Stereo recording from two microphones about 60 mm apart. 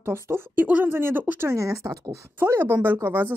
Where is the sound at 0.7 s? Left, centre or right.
Right.